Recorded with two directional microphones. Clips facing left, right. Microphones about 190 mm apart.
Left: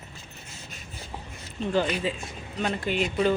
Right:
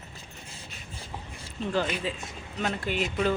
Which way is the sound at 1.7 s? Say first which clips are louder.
Left 3 dB; centre (ahead or behind).